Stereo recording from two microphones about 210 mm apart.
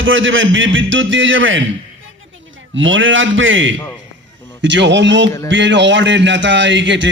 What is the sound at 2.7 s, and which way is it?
A man's voice, 65° right (ahead or behind).